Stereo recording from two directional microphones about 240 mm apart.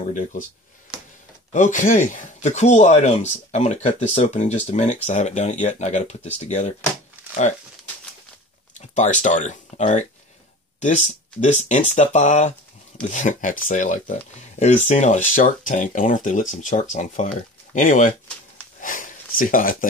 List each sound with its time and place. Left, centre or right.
0.1 s speech: left
1.5 s speech: left
8.7 s speech: left